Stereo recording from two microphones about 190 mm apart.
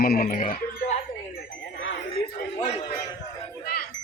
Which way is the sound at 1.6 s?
85° left.